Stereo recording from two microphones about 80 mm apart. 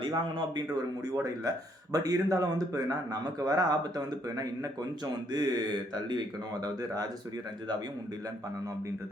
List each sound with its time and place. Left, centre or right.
1.0 s speech: right